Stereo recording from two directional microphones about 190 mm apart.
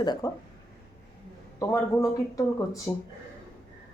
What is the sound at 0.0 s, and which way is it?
Speech, 20° left (ahead or behind).